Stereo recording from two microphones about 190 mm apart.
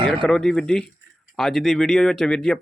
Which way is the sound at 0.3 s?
5° left (ahead or behind).